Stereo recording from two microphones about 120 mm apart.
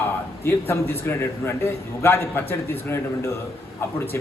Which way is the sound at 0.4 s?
20° left (ahead or behind).